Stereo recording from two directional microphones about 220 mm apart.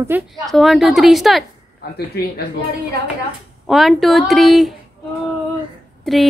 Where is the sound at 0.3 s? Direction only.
Centre (ahead or behind).